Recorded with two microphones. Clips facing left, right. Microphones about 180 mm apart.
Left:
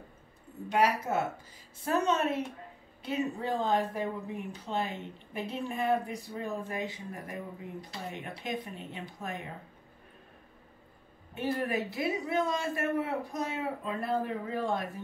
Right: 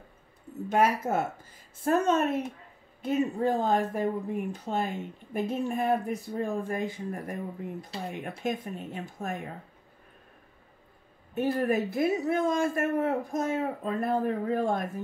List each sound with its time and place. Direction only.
0.7 s a man's voice: 45° right (ahead or behind)
11.3 s a man's voice: 45° right (ahead or behind)